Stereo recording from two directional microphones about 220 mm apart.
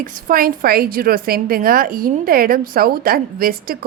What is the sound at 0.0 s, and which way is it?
A woman's voice, 40° right (ahead or behind).